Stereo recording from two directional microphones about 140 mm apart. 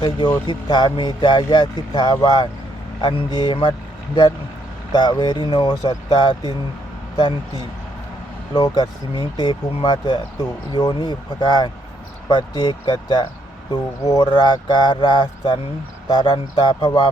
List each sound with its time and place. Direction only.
0.4 s speech: 35° left (ahead or behind)